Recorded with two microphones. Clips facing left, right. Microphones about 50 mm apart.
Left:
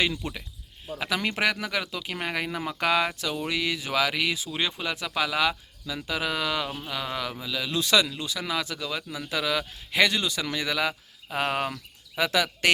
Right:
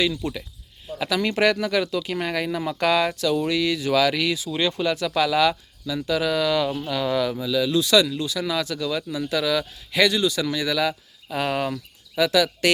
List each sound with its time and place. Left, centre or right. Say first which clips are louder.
0.0 s speech: right 4 dB; left
7.8 s speech: right 3 dB; left